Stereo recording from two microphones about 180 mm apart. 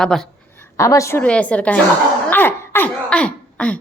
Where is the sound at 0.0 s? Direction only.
5° left (ahead or behind).